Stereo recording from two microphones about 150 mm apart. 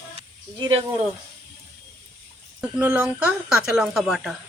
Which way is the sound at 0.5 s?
30° right (ahead or behind).